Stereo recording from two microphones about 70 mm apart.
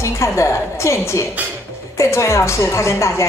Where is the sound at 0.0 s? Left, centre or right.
Left.